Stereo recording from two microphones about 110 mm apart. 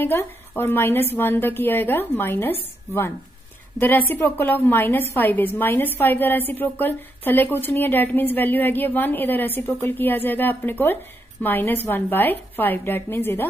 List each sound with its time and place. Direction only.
0.0 s a woman's voice: 20° left (ahead or behind)
3.8 s a woman's voice: 20° left (ahead or behind)